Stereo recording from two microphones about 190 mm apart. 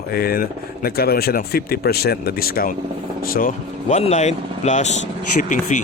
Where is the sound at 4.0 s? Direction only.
35° left (ahead or behind).